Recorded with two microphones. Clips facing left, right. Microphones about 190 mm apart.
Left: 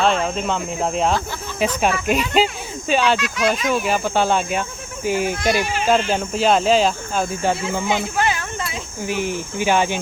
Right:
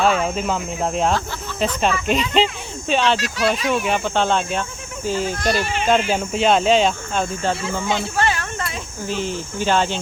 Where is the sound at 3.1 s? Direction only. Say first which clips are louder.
Left 1 dB; 35° right (ahead or behind).